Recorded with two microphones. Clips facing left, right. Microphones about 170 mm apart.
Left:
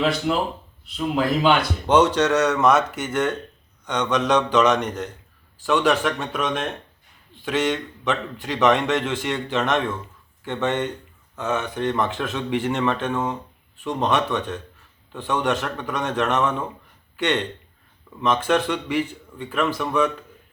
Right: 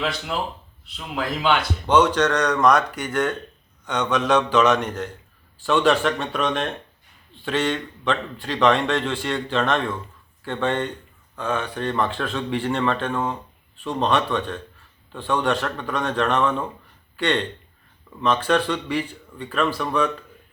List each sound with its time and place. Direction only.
0.9 s speech: 5° left (ahead or behind)
5.6 s speech: 15° left (ahead or behind)